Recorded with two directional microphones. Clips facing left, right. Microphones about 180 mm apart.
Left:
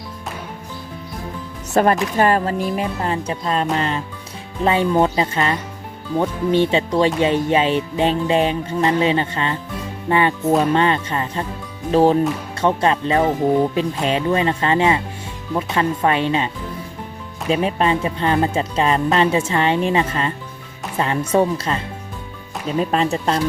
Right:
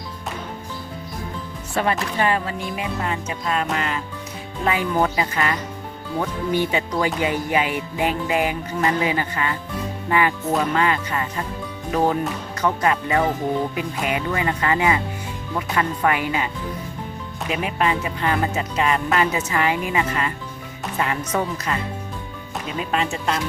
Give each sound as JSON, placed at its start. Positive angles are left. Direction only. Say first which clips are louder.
{"t": 1.7, "sound": "speech", "louder": "left 6 dB", "side_deg": 45}
{"t": 4.6, "sound": "music", "louder": "left 5 dB", "side_deg": 30}
{"t": 17.5, "sound": "speech", "louder": "left 5 dB", "side_deg": 30}